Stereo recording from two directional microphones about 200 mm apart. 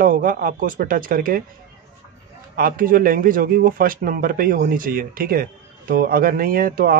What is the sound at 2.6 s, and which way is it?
Speech, 45° right (ahead or behind).